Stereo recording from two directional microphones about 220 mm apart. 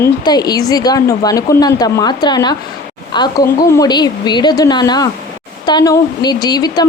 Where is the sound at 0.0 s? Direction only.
20° left (ahead or behind).